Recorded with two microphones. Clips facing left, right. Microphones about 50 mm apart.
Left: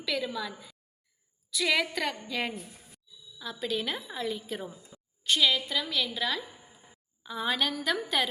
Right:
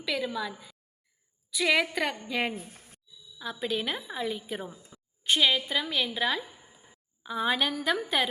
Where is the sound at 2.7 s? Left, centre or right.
Right.